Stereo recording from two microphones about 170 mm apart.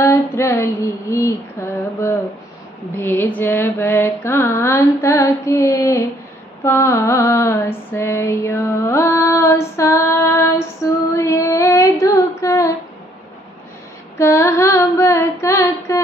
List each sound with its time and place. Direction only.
0.0 s female singing: 15° left (ahead or behind)
1.1 s mantra: 15° left (ahead or behind)
11.1 s female singing: 15° left (ahead or behind)
14.1 s a sound: 15° left (ahead or behind)